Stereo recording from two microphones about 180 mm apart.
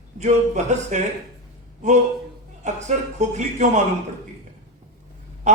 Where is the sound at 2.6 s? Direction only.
40° right (ahead or behind).